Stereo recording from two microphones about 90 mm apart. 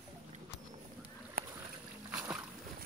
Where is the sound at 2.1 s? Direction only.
10° right (ahead or behind).